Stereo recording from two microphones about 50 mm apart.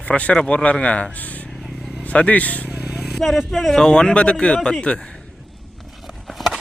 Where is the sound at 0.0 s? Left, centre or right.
Left.